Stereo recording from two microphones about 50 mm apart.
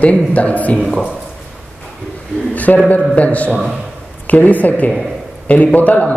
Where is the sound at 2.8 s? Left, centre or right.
Left.